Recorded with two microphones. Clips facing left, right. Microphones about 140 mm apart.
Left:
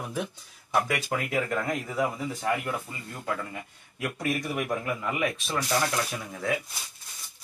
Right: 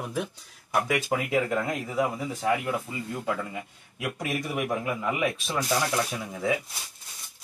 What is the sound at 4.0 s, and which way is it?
Speech, 5° right (ahead or behind).